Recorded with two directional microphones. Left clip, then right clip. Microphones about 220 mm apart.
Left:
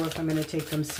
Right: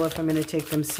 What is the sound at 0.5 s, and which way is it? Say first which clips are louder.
Speech: right 4 dB; 50° right (ahead or behind).